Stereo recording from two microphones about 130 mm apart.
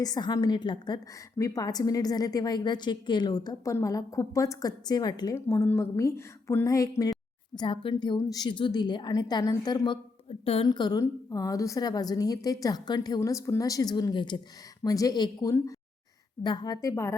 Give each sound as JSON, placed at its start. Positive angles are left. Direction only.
{"t": 0.0, "sound": "a woman's voice", "side_deg": 30}
{"t": 7.6, "sound": "a woman's voice", "side_deg": 40}
{"t": 10.2, "sound": "a woman's voice", "side_deg": 45}
{"t": 10.7, "sound": "a woman's voice", "side_deg": 30}